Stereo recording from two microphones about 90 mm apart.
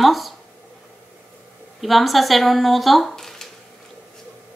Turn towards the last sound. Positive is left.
turn(degrees=5)  # may be behind; listen again after turning